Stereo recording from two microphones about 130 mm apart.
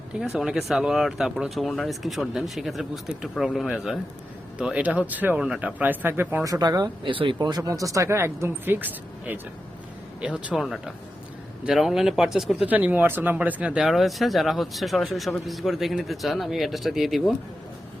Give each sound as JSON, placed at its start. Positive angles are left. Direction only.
{"t": 0.3, "sound": "speech", "side_deg": -5}
{"t": 4.5, "sound": "speech", "side_deg": -10}